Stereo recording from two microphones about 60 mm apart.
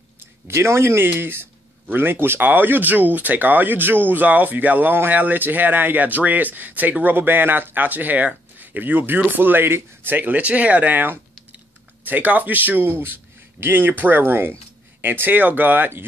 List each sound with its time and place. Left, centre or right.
0.2 s a man's voice: right